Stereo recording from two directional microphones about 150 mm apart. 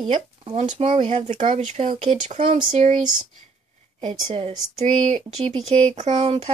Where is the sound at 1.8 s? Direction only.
55° right (ahead or behind).